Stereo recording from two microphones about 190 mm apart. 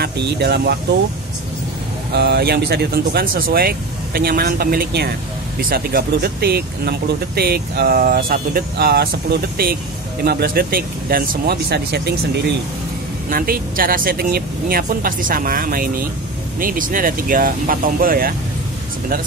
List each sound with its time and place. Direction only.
0.0 s speech: 60° right (ahead or behind)
2.1 s speech: 60° right (ahead or behind)
13.3 s speech: 50° right (ahead or behind)